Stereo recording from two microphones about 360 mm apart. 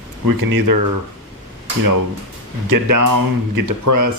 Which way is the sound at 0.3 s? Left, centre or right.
Right.